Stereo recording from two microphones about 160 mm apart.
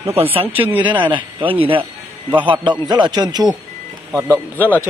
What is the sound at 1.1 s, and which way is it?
A man's voice, 30° right (ahead or behind).